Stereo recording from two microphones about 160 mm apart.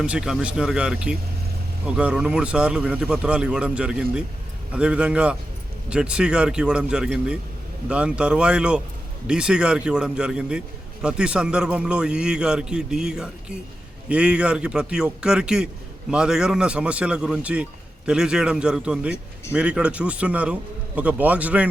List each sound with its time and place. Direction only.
0.0 s a man's voice: 5° right (ahead or behind)